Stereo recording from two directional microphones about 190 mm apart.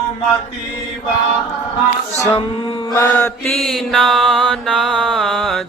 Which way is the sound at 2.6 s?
15° left (ahead or behind).